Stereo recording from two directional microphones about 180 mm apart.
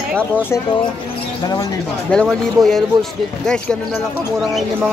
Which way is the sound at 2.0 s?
5° left (ahead or behind).